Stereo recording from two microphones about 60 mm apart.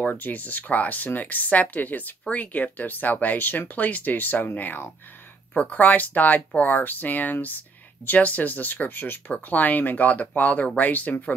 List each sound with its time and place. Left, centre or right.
0.0 s speech: left